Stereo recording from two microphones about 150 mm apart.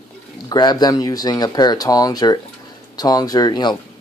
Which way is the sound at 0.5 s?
30° left (ahead or behind).